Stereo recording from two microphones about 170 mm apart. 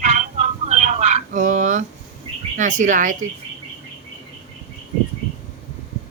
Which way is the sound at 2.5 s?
50° right (ahead or behind).